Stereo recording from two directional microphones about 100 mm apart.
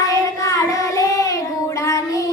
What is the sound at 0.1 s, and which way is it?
Child singing, 35° left (ahead or behind).